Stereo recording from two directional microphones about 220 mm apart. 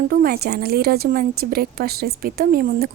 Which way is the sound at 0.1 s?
45° right (ahead or behind).